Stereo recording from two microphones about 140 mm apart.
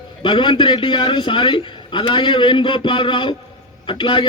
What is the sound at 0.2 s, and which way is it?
A man's voice, 35° left (ahead or behind).